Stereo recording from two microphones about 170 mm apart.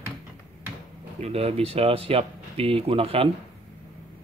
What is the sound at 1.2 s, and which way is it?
Speech, 35° right (ahead or behind).